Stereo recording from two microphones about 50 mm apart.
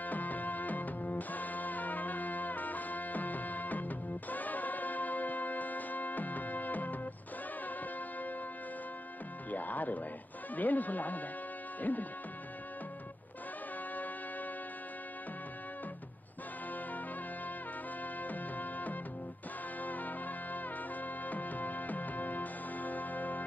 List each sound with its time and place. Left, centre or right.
0.0 s music: left
9.5 s music: left
10.5 s speech: left
18.2 s music: left
19.8 s trumpet: left